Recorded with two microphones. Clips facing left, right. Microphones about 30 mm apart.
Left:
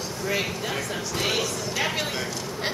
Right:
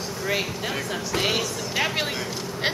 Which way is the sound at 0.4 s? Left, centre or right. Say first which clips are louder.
Even; centre.